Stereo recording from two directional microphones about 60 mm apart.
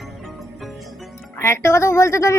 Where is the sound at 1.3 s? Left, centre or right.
Left.